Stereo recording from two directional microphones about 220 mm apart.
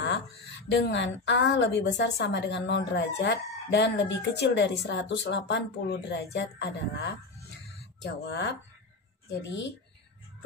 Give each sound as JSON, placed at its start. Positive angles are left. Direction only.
{"t": 0.0, "sound": "a woman's voice", "side_deg": 55}